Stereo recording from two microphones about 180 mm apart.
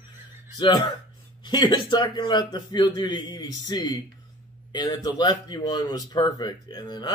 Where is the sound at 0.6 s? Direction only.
25° left (ahead or behind).